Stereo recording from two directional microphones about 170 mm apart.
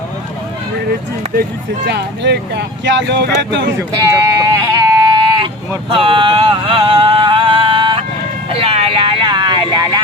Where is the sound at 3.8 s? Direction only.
20° right (ahead or behind).